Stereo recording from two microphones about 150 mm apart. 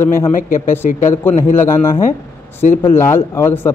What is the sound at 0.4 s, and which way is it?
Speech, 65° left (ahead or behind).